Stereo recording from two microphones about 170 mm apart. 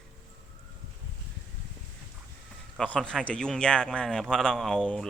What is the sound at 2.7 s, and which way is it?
Speech, 5° left (ahead or behind).